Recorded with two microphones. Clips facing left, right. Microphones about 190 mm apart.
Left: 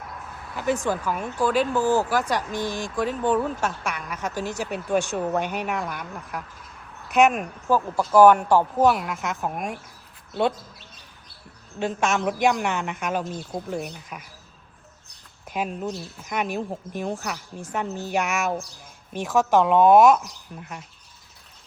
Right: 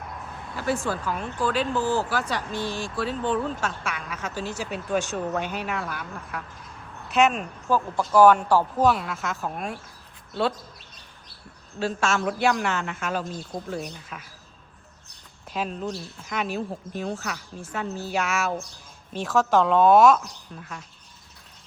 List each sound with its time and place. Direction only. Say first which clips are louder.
0.5 s speech: left 2 dB; 20° left (ahead or behind)
11.8 s speech: left 1 dB; 15° left (ahead or behind)
13.7 s speech: left 2 dB; 5° left (ahead or behind)
15.4 s speech: left 1 dB; 10° left (ahead or behind)